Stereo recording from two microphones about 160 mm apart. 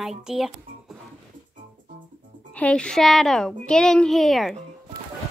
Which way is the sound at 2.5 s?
5° left (ahead or behind).